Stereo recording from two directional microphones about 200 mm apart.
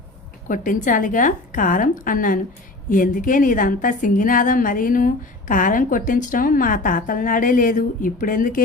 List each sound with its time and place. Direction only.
0.4 s a woman's voice: 40° left (ahead or behind)